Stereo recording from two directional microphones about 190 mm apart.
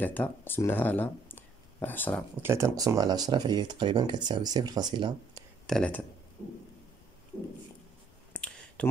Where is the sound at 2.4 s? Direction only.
15° right (ahead or behind).